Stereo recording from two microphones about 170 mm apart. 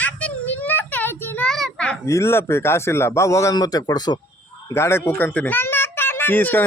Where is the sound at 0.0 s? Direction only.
10° left (ahead or behind).